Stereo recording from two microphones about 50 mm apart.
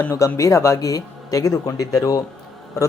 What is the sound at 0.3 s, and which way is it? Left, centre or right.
Speech, left.